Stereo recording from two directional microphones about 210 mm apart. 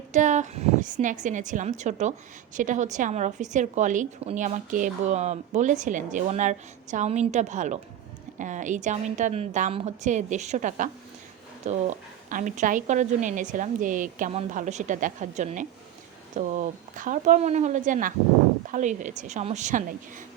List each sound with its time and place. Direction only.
0.1 s a woman's voice: 35° right (ahead or behind)